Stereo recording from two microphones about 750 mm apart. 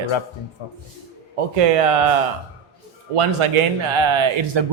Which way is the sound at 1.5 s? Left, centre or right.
Right.